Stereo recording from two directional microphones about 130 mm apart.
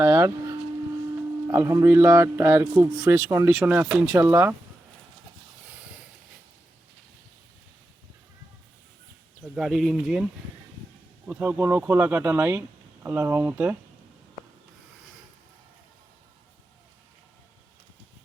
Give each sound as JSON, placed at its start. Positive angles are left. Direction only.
{"t": 0.0, "sound": "a sound", "side_deg": -20}
{"t": 1.5, "sound": "speech", "side_deg": -25}
{"t": 9.6, "sound": "speech", "side_deg": 0}
{"t": 11.3, "sound": "speech", "side_deg": -15}